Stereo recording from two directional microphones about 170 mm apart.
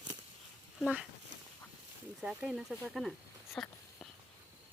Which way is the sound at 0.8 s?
5° right (ahead or behind).